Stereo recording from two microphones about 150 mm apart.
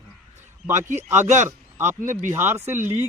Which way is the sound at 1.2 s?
55° right (ahead or behind).